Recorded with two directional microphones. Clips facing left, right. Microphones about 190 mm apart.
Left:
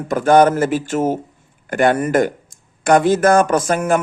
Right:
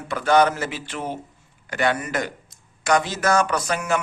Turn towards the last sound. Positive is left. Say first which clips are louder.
# left 7 dB
turn(degrees=50)  # may be behind; listen again after turning